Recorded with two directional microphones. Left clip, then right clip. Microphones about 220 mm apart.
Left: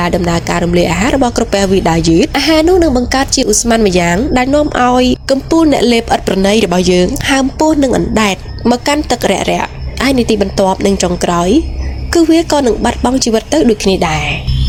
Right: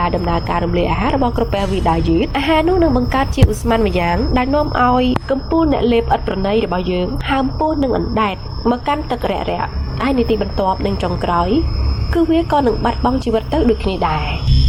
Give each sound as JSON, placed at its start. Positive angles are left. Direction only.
{"t": 0.0, "sound": "speech", "side_deg": 50}